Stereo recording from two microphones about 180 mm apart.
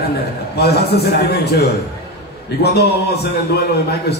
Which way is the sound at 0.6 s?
60° left (ahead or behind).